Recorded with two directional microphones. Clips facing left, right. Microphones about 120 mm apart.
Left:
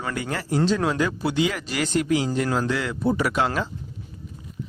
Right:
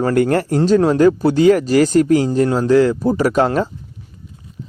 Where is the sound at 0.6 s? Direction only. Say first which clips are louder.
Right 10 dB; 40° right (ahead or behind).